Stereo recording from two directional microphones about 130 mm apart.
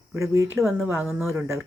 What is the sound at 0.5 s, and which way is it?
Speech, centre (ahead or behind).